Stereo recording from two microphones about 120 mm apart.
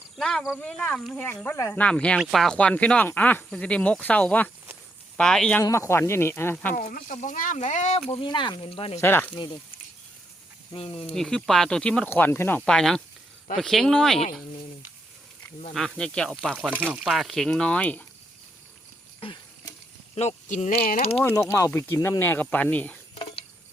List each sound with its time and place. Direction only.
0.2 s speech: 5° left (ahead or behind)
5.6 s speech: 25° left (ahead or behind)
6.8 s speech: 90° left; by 8.0 s 75° left (ahead or behind)
8.1 s speech: 45° left (ahead or behind)
9.0 s speech: 20° left (ahead or behind)
10.8 s speech: 45° left (ahead or behind)
11.0 s speech: 5° left (ahead or behind)
12.1 s speech: 20° left (ahead or behind)
12.6 s speech: 5° left (ahead or behind)
16.0 s speech: 5° left (ahead or behind)
19.2 s a sound: 40° left (ahead or behind)
20.1 s speech: 70° left (ahead or behind)
21.1 s speech: 20° left (ahead or behind)